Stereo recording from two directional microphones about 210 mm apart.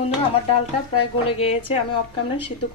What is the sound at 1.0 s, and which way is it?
Speech, 25° left (ahead or behind).